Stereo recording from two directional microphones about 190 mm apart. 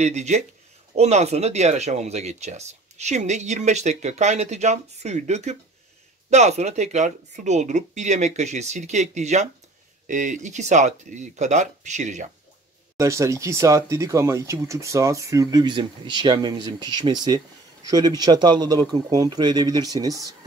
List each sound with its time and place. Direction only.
0.0 s speech: 35° right (ahead or behind)
12.9 s speech: 15° right (ahead or behind)